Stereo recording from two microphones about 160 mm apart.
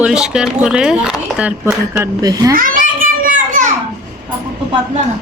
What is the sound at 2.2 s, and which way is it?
Speech, 20° right (ahead or behind).